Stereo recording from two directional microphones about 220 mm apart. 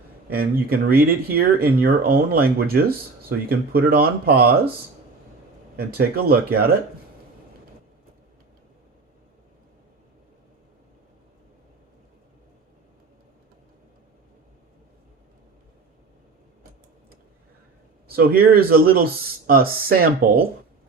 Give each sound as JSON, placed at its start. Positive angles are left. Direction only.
{"t": 0.3, "sound": "speech", "side_deg": -45}
{"t": 5.7, "sound": "speech", "side_deg": -45}
{"t": 18.1, "sound": "speech", "side_deg": -45}